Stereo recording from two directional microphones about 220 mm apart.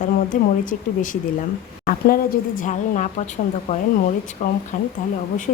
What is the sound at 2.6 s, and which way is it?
A woman's voice, 35° left (ahead or behind).